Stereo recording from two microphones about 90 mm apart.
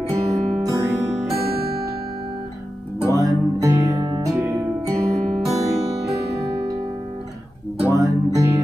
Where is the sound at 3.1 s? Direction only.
40° right (ahead or behind).